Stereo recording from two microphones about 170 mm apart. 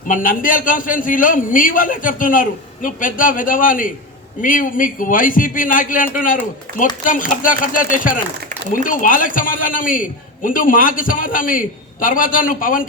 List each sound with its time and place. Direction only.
0.1 s a man's voice: 50° left (ahead or behind)
6.7 s a sound: 55° right (ahead or behind)
7.0 s a man's voice: 50° left (ahead or behind)